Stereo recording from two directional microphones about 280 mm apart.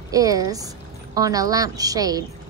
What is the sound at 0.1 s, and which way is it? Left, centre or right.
A woman's voice, centre.